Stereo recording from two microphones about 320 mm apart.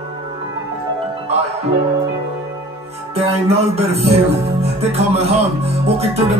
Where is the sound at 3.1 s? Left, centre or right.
Centre.